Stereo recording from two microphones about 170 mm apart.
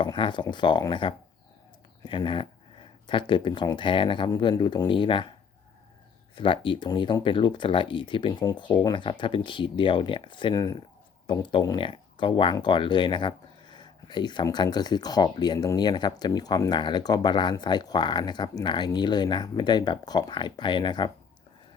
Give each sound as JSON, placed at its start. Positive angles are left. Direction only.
{"t": 0.0, "sound": "speech", "side_deg": 25}
{"t": 6.3, "sound": "speech", "side_deg": 30}